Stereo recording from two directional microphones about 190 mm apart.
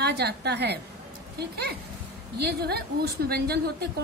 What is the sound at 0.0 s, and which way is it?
A woman's voice, 60° right (ahead or behind).